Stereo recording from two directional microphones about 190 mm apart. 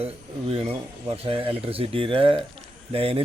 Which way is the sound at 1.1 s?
30° right (ahead or behind).